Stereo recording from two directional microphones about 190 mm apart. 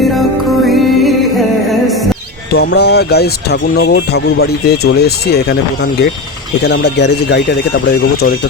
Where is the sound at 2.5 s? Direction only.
60° left (ahead or behind).